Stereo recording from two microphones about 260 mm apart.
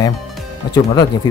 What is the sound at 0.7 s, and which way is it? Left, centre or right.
Speech, centre.